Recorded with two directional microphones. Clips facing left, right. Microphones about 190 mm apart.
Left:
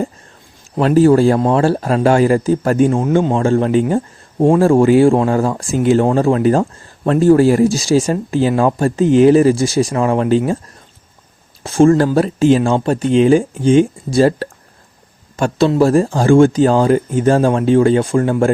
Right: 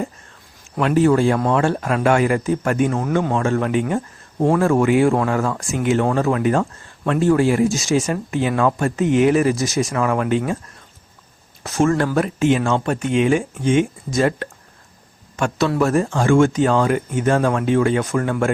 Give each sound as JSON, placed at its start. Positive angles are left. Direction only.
{"t": 0.8, "sound": "speech", "side_deg": 35}
{"t": 4.4, "sound": "speech", "side_deg": 15}
{"t": 4.6, "sound": "speech", "side_deg": 30}
{"t": 11.6, "sound": "speech", "side_deg": 30}